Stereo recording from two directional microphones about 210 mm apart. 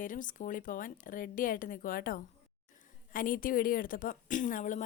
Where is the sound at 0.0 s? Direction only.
40° left (ahead or behind).